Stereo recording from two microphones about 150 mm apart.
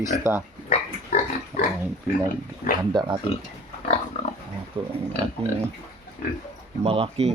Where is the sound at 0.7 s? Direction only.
45° left (ahead or behind).